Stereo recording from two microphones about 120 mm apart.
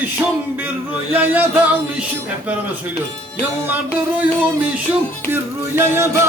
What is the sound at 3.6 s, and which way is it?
Speech, 15° right (ahead or behind).